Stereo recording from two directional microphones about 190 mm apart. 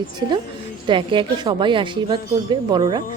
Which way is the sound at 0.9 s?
25° right (ahead or behind).